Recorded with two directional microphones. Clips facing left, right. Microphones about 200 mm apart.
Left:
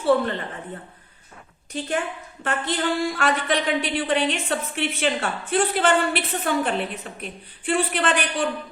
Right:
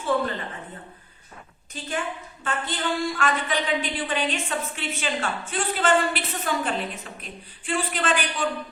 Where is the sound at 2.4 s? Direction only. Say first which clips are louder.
Left 4 dB; 65° left (ahead or behind).